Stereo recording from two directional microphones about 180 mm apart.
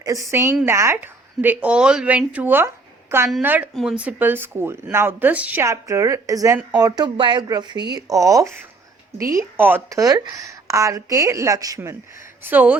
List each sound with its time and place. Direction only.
0.0 s speech: 20° right (ahead or behind)